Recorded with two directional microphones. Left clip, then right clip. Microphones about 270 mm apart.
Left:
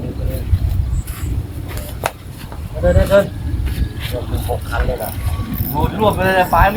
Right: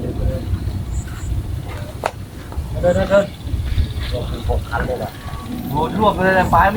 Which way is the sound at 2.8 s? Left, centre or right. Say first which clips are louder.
Left 1 dB; left.